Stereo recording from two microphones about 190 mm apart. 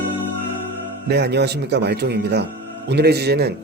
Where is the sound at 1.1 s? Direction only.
60° right (ahead or behind).